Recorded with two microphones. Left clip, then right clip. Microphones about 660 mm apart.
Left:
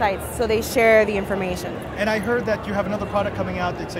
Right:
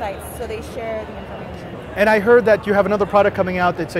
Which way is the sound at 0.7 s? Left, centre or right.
Left.